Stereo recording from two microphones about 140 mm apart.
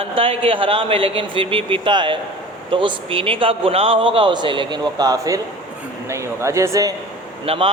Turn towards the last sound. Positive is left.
turn(degrees=-45)  # may be behind; listen again after turning